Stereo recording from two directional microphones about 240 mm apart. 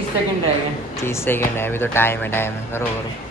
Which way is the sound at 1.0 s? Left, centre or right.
Centre.